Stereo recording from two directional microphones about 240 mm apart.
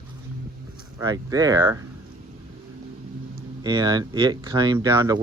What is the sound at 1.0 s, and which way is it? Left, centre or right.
Speech, centre.